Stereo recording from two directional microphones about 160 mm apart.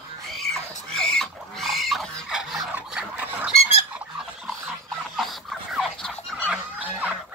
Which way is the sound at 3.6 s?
40° left (ahead or behind).